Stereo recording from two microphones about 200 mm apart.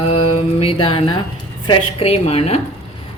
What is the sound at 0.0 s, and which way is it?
Mantra, 30° left (ahead or behind).